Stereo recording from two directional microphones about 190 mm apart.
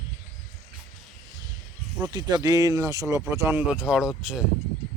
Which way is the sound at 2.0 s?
20° right (ahead or behind).